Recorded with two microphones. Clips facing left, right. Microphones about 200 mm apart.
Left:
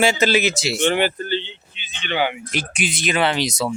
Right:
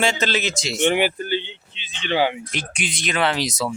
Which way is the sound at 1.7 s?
30° right (ahead or behind).